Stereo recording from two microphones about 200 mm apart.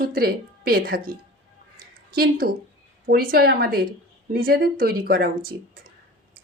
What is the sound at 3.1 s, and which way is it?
Speech, 50° right (ahead or behind).